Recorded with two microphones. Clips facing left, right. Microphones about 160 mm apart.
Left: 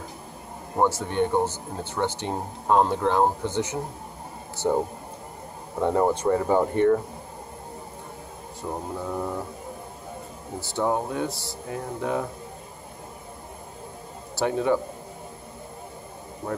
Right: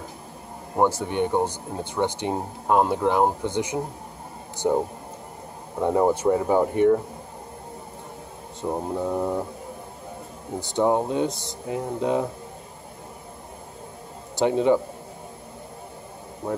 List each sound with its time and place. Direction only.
0.7 s speech: 10° right (ahead or behind)
8.6 s speech: 20° right (ahead or behind)
10.6 s speech: 20° right (ahead or behind)
14.3 s speech: 20° right (ahead or behind)